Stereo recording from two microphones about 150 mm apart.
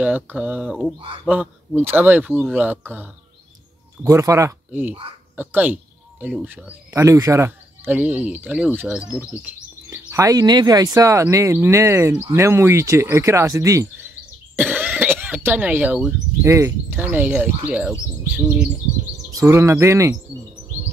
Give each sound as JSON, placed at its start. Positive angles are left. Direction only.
{"t": 0.0, "sound": "speech", "side_deg": -10}
{"t": 10.1, "sound": "speech", "side_deg": -25}
{"t": 19.3, "sound": "speech", "side_deg": -20}